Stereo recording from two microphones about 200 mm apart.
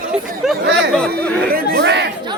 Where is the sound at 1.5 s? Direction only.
50° right (ahead or behind).